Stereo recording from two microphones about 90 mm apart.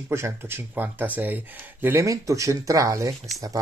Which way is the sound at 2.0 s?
35° right (ahead or behind).